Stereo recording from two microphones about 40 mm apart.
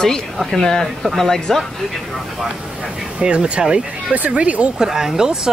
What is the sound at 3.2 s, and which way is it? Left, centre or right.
Speech, right.